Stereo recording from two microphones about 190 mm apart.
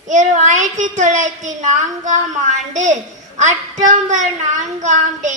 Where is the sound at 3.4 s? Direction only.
40° right (ahead or behind).